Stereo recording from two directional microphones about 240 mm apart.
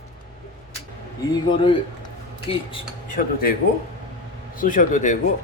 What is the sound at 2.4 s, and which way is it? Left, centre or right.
Speech, left.